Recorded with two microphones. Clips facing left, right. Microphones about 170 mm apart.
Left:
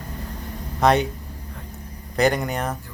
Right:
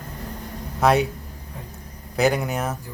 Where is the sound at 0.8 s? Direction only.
5° right (ahead or behind).